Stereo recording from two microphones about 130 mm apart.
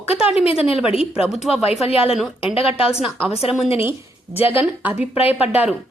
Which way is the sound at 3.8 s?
15° right (ahead or behind).